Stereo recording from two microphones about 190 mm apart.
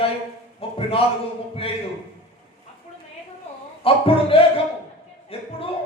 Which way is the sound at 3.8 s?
30° left (ahead or behind).